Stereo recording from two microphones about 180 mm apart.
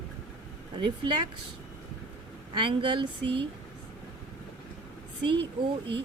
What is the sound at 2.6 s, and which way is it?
Speech, 30° right (ahead or behind).